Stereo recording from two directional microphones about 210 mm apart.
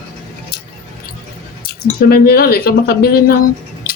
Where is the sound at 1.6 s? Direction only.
45° left (ahead or behind).